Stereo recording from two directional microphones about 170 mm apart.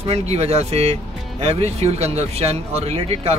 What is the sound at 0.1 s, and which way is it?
Speech, 40° right (ahead or behind).